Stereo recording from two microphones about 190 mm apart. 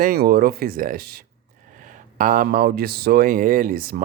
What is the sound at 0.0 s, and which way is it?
Speech, 55° right (ahead or behind).